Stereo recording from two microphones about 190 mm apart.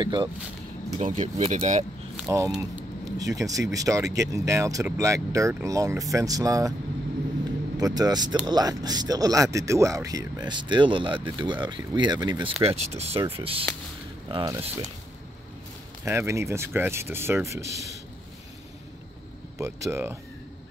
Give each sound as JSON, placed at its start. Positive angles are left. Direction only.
{"t": 0.0, "sound": "speech", "side_deg": -25}
{"t": 0.9, "sound": "speech", "side_deg": -35}
{"t": 2.2, "sound": "speech", "side_deg": -15}
{"t": 7.7, "sound": "speech", "side_deg": -20}
{"t": 14.3, "sound": "speech", "side_deg": -15}
{"t": 16.0, "sound": "speech", "side_deg": -15}
{"t": 19.6, "sound": "speech", "side_deg": -15}